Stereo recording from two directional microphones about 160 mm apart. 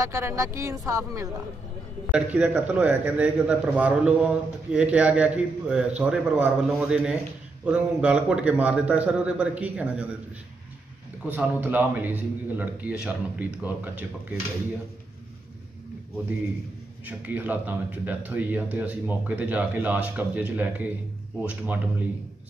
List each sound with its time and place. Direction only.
0.0 s a woman's voice: 15° right (ahead or behind)
2.0 s speech: 5° right (ahead or behind)
11.2 s speech: 10° right (ahead or behind)
17.0 s speech: 10° right (ahead or behind)